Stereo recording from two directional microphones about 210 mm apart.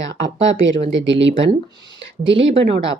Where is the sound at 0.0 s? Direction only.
60° right (ahead or behind).